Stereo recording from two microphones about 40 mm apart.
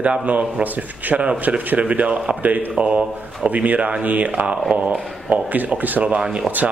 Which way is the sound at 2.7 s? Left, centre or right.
Right.